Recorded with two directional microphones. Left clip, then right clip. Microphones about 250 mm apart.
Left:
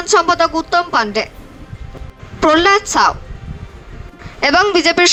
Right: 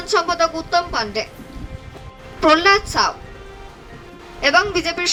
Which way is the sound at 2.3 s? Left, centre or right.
Left.